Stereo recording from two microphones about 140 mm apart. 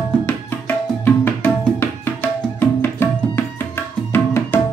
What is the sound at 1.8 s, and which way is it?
Music, 15° left (ahead or behind).